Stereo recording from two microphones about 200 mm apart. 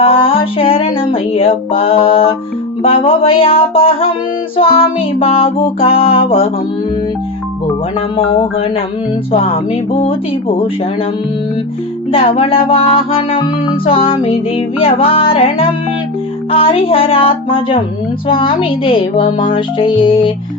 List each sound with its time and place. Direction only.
0.0 s music: 30° left (ahead or behind)
8.1 s music: 30° left (ahead or behind)
12.1 s music: 30° left (ahead or behind)